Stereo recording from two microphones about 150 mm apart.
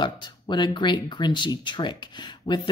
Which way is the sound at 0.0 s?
30° left (ahead or behind).